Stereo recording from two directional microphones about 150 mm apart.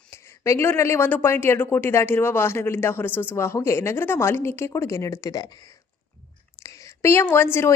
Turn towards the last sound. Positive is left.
turn(degrees=15)  # may be behind; listen again after turning